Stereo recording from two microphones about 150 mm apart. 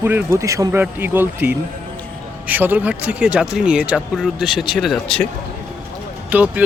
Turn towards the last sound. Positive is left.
turn(degrees=-15)  # may be behind; listen again after turning